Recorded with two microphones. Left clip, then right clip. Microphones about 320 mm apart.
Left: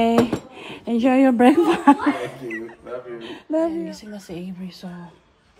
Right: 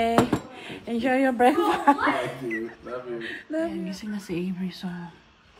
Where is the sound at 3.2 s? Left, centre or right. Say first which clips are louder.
Left 8 dB; left.